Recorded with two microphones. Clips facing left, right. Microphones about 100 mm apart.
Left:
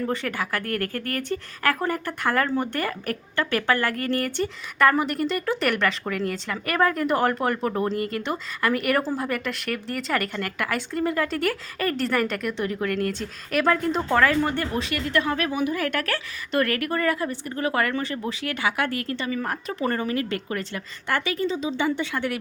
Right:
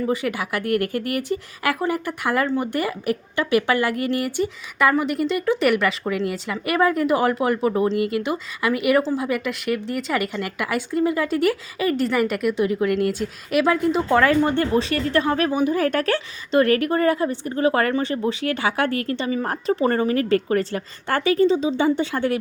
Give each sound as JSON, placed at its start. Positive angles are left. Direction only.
{"t": 0.0, "sound": "a woman's voice", "side_deg": -10}
{"t": 14.2, "sound": "a woman's voice", "side_deg": -25}